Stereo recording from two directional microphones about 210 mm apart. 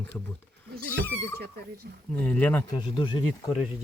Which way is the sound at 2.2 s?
5° left (ahead or behind).